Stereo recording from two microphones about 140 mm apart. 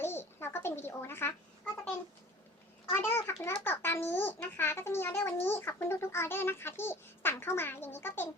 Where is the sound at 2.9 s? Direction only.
15° left (ahead or behind).